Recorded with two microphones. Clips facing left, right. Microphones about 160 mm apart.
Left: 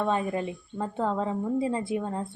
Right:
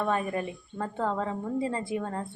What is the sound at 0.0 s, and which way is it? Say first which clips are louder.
A woman's voice: left 1 dB; 15° left (ahead or behind).